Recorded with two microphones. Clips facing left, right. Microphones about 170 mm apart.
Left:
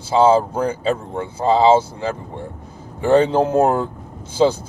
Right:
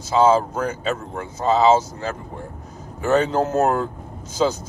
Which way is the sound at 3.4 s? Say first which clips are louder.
Left 4 dB; 10° left (ahead or behind).